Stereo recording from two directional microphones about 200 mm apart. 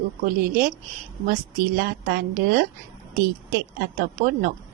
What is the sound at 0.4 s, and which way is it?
A woman's voice, 50° right (ahead or behind).